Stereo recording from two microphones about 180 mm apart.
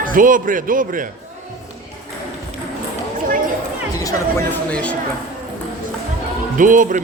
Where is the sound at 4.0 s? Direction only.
15° left (ahead or behind).